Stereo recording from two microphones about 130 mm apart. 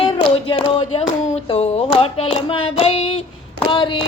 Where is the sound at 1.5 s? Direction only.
50° left (ahead or behind).